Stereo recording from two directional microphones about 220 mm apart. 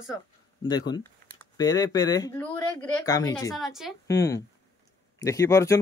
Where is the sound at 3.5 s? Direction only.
Centre (ahead or behind).